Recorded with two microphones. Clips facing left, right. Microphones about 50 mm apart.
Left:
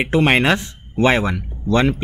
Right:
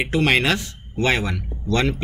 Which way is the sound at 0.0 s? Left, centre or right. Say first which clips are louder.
Left 3 dB; left.